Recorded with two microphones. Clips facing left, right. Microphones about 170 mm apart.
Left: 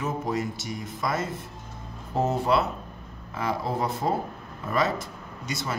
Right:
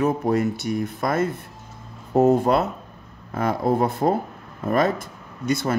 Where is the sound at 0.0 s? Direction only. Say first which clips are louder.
Right 8 dB; 60° right (ahead or behind).